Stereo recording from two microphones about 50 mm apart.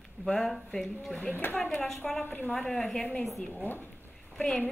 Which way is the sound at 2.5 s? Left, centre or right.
Centre.